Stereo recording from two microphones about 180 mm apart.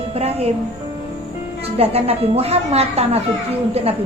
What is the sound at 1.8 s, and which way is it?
Speech, 35° right (ahead or behind).